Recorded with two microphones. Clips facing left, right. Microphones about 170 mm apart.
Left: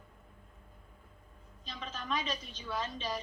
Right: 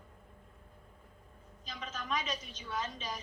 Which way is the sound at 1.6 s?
30° left (ahead or behind).